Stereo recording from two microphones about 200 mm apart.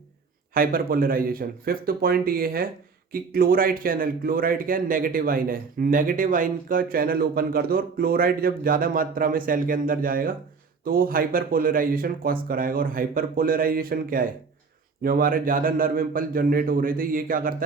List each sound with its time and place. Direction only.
0.5 s speech: 45° right (ahead or behind)